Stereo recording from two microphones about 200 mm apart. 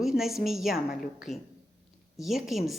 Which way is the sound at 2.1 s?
Centre (ahead or behind).